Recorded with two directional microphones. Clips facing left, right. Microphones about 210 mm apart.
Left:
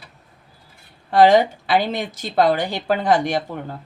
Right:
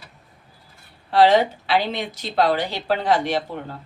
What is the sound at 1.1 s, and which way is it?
A woman's voice, 50° left (ahead or behind).